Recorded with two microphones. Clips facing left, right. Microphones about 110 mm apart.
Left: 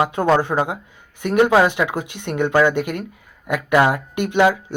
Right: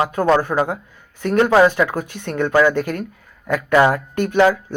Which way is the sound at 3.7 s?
5° left (ahead or behind).